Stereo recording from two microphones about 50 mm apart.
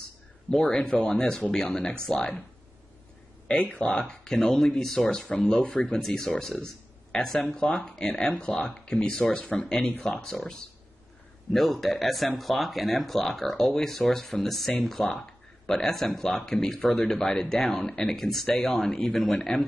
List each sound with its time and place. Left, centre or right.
0.5 s speech: centre
3.4 s speech: left
5.7 s speech: left
5.9 s speech: centre